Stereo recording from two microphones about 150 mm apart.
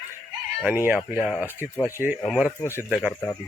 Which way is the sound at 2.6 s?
20° left (ahead or behind).